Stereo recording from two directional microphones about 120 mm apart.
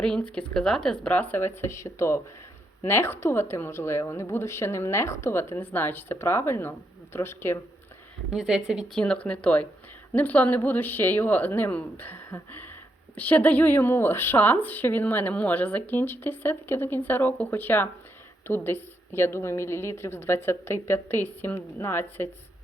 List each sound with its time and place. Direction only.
0.0 s a woman's voice: 10° left (ahead or behind)
8.3 s speech: 5° right (ahead or behind)
8.9 s a woman's voice: 10° left (ahead or behind)